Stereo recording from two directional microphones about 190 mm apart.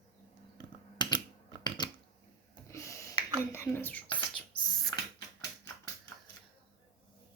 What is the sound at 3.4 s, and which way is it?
Speech, 10° left (ahead or behind).